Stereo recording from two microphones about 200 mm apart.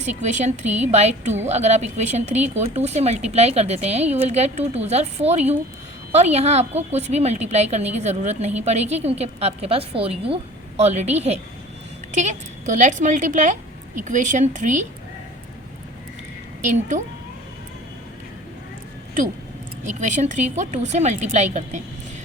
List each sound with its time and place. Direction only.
0.0 s a woman's voice: 35° right (ahead or behind)
16.6 s a woman's voice: 35° right (ahead or behind)
19.8 s a woman's voice: 35° right (ahead or behind)